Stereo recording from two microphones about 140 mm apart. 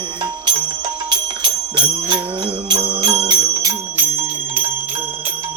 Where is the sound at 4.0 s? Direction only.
15° right (ahead or behind).